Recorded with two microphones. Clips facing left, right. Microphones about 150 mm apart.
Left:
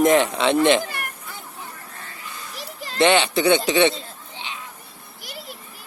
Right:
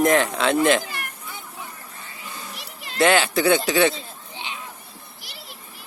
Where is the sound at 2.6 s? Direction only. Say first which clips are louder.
Left 4 dB; 35° left (ahead or behind).